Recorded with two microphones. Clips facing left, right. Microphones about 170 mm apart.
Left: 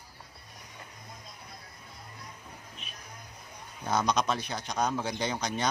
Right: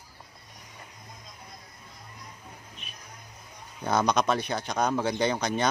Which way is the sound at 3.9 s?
60° right (ahead or behind).